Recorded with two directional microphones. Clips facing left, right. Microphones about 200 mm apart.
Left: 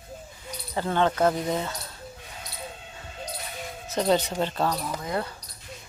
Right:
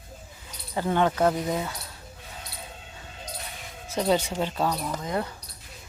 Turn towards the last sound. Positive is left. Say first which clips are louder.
# right 1 dB
turn(degrees=-15)  # may be behind; listen again after turning